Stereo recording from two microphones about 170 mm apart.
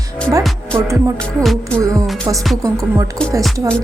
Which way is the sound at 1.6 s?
15° right (ahead or behind).